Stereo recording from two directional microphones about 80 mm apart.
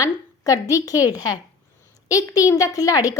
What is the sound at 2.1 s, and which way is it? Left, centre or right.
A woman's voice, left.